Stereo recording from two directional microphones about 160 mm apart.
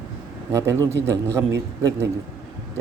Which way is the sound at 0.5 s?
20° right (ahead or behind).